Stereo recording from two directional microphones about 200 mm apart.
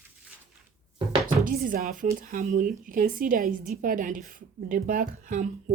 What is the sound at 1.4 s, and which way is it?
Speech, 45° right (ahead or behind).